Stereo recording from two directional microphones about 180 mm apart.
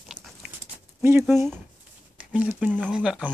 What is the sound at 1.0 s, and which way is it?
Speech, 10° right (ahead or behind).